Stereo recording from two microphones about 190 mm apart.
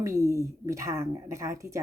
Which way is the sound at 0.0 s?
15° right (ahead or behind).